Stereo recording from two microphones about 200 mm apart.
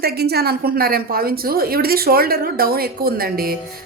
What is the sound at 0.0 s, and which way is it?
A woman's voice, 50° right (ahead or behind).